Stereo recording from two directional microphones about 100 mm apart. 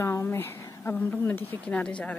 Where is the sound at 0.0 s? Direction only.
25° left (ahead or behind).